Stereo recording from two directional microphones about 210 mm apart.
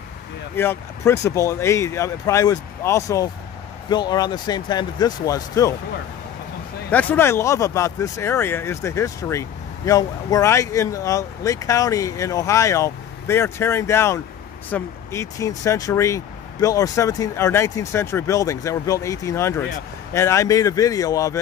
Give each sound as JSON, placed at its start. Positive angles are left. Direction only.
{"t": 0.6, "sound": "speech", "side_deg": 10}
{"t": 6.9, "sound": "speech", "side_deg": 10}